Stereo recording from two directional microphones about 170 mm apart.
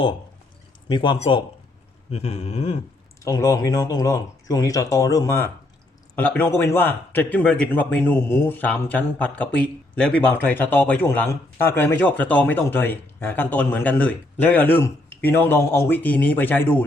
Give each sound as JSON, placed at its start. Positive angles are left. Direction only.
{"t": 0.9, "sound": "speech", "side_deg": 30}
{"t": 2.0, "sound": "a sound", "side_deg": 35}
{"t": 3.2, "sound": "speech", "side_deg": 20}